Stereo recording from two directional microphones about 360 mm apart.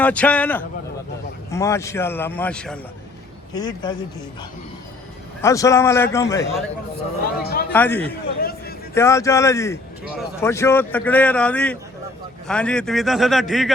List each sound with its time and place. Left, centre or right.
0.0 s a man's voice: centre
5.4 s a man's voice: centre
7.2 s a man's voice: left
7.7 s speech: centre
8.4 s a man's voice: left
9.0 s a man's voice: centre